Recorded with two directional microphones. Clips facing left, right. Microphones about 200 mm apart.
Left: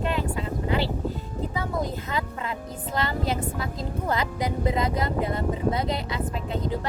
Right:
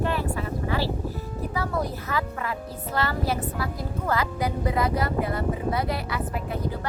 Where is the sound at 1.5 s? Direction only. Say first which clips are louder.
Right 1 dB; 20° left (ahead or behind).